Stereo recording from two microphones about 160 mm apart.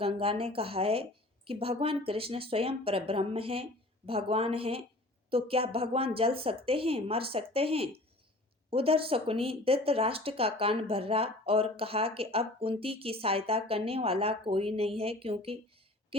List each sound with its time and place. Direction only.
0.0 s speech: 35° right (ahead or behind)